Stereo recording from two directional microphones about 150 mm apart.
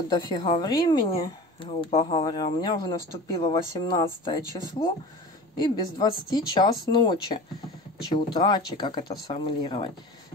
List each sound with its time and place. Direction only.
0.1 s a woman's voice: 30° left (ahead or behind)
2.2 s a woman's voice: 30° left (ahead or behind)